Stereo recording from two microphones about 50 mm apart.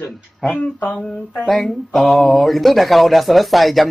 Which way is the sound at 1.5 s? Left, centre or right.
Centre.